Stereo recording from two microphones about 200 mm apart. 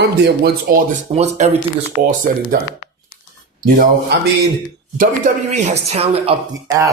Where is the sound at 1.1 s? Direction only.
30° right (ahead or behind).